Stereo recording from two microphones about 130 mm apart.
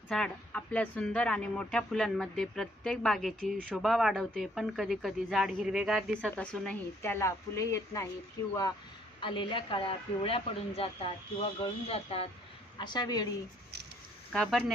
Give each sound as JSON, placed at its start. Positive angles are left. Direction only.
{"t": 0.1, "sound": "speech", "side_deg": 5}
{"t": 6.3, "sound": "speech", "side_deg": 10}
{"t": 7.0, "sound": "speech", "side_deg": 20}
{"t": 9.2, "sound": "speech", "side_deg": 40}
{"t": 12.8, "sound": "a woman's voice", "side_deg": 35}